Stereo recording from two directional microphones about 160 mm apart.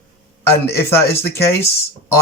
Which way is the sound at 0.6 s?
15° left (ahead or behind).